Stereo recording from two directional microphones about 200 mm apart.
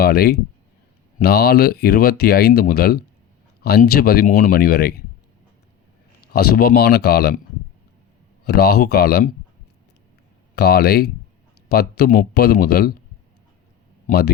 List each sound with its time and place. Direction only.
0.0 s speech: 50° left (ahead or behind)
6.2 s speech: 50° left (ahead or behind)
8.4 s speech: 50° left (ahead or behind)
10.5 s speech: 50° left (ahead or behind)
14.1 s speech: 55° left (ahead or behind)